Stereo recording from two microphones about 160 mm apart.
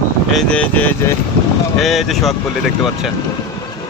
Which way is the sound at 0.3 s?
5° left (ahead or behind).